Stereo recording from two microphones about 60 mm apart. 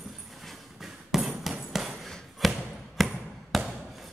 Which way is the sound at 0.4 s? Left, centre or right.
Centre.